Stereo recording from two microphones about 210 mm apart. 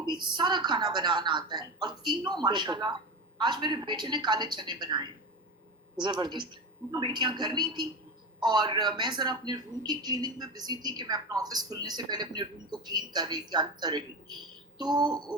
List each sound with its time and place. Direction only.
0.0 s speech: 20° right (ahead or behind)